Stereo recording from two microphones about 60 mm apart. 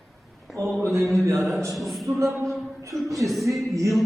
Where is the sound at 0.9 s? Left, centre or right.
Right.